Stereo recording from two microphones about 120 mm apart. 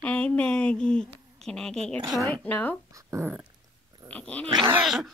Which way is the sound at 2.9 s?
25° right (ahead or behind).